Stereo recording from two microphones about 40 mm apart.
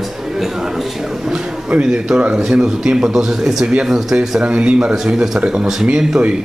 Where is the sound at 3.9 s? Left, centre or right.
Centre.